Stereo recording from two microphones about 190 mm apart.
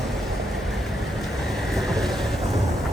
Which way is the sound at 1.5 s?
Centre (ahead or behind).